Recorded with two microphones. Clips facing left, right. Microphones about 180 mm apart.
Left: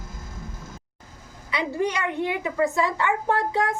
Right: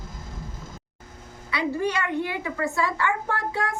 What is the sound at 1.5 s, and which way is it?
A child's voice, 20° left (ahead or behind).